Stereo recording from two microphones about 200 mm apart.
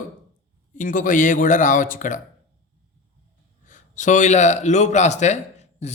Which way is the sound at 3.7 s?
40° left (ahead or behind).